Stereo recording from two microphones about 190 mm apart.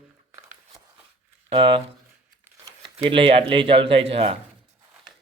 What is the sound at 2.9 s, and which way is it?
A man's voice, 30° right (ahead or behind).